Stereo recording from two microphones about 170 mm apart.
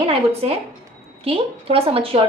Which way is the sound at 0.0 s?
35° right (ahead or behind).